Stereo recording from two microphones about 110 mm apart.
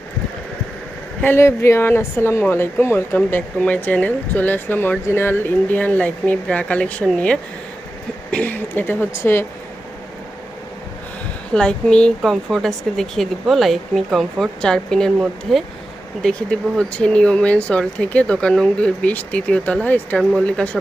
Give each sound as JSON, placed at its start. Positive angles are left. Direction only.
{"t": 1.2, "sound": "speech", "side_deg": 20}
{"t": 11.5, "sound": "speech", "side_deg": 10}